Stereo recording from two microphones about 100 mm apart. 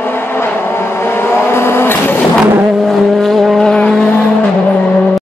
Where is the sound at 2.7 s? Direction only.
Centre (ahead or behind).